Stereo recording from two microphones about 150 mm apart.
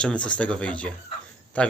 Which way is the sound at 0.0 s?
5° left (ahead or behind).